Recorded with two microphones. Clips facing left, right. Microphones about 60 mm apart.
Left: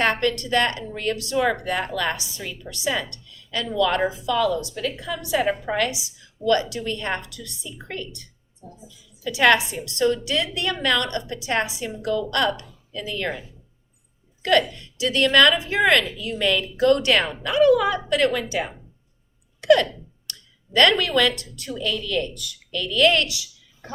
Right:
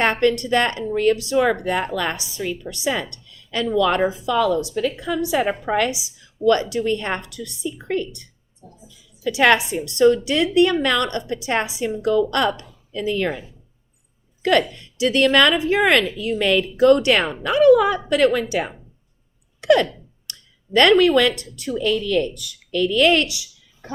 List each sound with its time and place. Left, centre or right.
0.0 s a woman's voice: right
9.2 s a woman's voice: right
14.4 s a woman's voice: right
19.6 s a sound: centre
20.7 s a woman's voice: right